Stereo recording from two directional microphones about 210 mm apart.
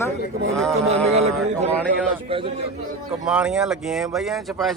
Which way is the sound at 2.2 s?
25° right (ahead or behind).